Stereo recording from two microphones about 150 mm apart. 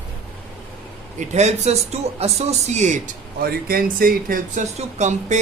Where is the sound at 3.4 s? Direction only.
80° right.